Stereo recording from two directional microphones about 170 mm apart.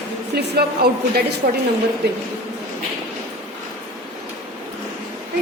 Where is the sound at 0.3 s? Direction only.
65° right (ahead or behind).